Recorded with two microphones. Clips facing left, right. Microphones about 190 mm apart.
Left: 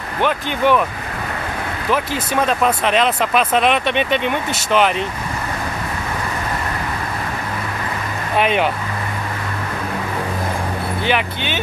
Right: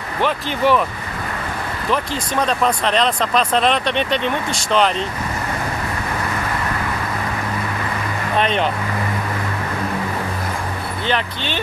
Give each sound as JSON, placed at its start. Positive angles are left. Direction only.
{"t": 0.2, "sound": "speech", "side_deg": 0}
{"t": 2.4, "sound": "speech", "side_deg": 5}
{"t": 8.4, "sound": "speech", "side_deg": 10}
{"t": 11.1, "sound": "speech", "side_deg": 10}